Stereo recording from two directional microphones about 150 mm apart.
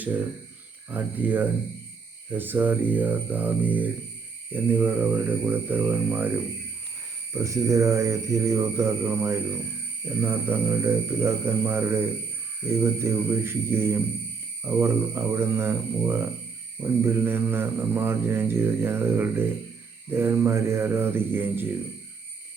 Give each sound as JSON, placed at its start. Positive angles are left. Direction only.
{"t": 0.9, "sound": "mantra", "side_deg": -10}
{"t": 7.3, "sound": "mantra", "side_deg": -20}